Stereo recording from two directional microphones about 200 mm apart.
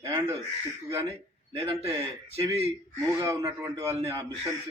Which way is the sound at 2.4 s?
20° right (ahead or behind).